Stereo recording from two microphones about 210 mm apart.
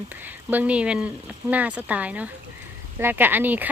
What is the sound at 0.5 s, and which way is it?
Speech, 5° right (ahead or behind).